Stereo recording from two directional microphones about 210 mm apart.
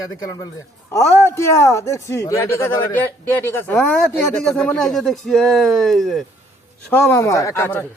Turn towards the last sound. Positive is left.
turn(degrees=10)  # may be behind; listen again after turning